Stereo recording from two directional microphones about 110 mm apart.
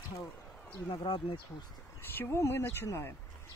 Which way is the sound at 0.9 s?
50° left (ahead or behind).